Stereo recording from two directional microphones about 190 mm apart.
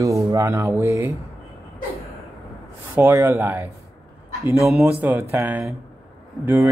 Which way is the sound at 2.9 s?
10° right (ahead or behind).